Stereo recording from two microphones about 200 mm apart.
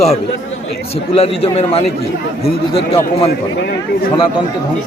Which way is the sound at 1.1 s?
30° left (ahead or behind).